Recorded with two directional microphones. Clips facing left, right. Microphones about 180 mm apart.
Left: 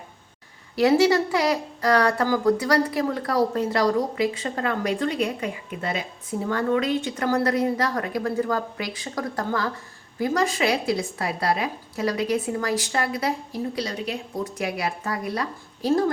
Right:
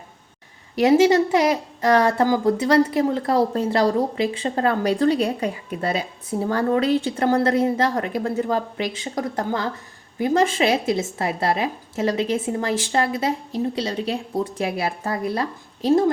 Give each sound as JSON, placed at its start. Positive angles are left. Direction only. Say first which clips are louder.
{"t": 0.8, "sound": "speech", "louder": "right 3 dB", "side_deg": -20}